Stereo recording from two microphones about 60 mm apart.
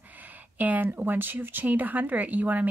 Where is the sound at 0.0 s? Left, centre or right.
Right.